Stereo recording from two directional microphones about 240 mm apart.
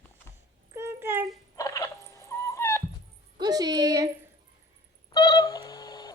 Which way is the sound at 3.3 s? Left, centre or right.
Centre.